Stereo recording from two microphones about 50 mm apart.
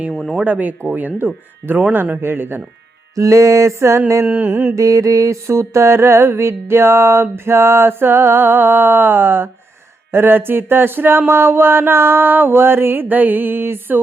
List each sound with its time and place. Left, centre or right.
0.1 s speech: centre
0.4 s speech: right
1.9 s mantra: right
3.2 s mantra: right
4.3 s mantra: right
4.7 s mantra: right